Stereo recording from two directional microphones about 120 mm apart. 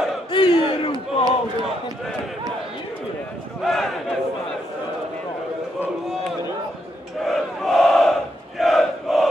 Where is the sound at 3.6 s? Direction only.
Centre (ahead or behind).